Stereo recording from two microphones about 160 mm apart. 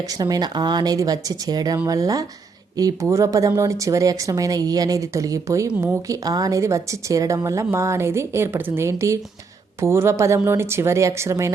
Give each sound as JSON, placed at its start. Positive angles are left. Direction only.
{"t": 0.1, "sound": "a woman's voice", "side_deg": -25}